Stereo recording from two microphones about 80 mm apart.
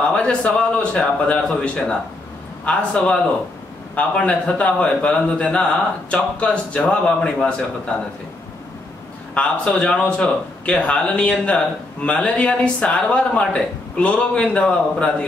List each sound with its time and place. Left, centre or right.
0.0 s a man's voice: centre
9.3 s a man's voice: centre